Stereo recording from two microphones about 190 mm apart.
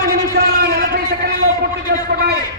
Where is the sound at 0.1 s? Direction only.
55° right (ahead or behind).